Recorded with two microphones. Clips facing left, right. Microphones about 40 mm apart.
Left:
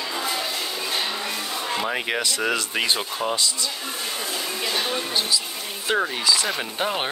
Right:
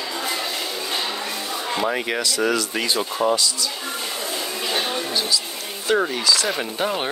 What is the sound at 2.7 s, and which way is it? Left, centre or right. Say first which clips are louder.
Speech: right 1 dB; left.